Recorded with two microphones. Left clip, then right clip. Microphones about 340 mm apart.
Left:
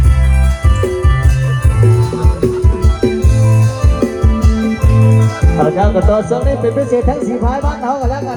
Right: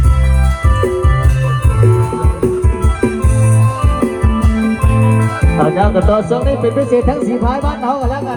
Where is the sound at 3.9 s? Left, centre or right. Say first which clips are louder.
Left 2 dB; right.